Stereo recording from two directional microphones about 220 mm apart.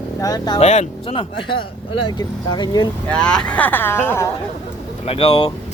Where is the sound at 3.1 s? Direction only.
5° left (ahead or behind).